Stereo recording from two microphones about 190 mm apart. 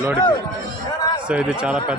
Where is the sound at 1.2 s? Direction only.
5° right (ahead or behind).